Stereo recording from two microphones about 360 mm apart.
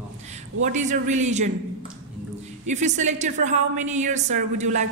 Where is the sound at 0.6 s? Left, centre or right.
Centre.